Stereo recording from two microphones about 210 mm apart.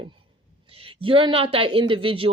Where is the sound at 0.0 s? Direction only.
25° right (ahead or behind).